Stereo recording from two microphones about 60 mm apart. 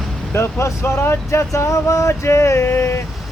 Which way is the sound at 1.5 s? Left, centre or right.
Left.